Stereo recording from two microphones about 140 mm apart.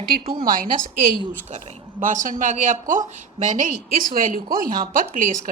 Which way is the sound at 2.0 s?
70° right (ahead or behind).